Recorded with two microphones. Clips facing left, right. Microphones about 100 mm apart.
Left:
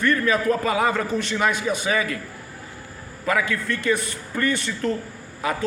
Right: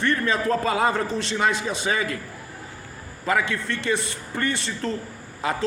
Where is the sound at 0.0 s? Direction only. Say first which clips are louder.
Left 2 dB; 30° right (ahead or behind).